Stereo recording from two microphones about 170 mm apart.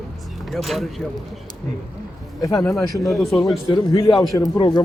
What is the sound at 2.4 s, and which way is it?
Speech, 20° left (ahead or behind).